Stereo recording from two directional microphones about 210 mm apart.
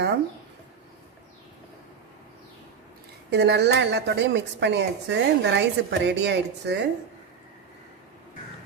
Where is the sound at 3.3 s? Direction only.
55° right (ahead or behind).